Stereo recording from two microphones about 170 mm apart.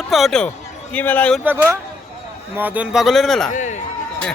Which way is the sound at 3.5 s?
45° left (ahead or behind).